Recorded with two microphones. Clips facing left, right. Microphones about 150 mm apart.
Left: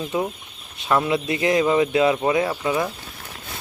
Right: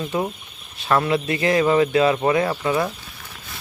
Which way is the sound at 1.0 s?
20° left (ahead or behind).